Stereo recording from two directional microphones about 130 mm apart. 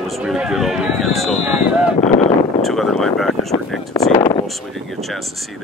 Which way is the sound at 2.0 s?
60° left (ahead or behind).